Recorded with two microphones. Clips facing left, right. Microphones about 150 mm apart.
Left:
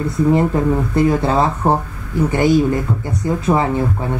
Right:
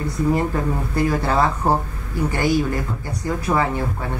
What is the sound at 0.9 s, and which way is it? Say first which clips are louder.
Speech: left 3 dB; 20° left (ahead or behind).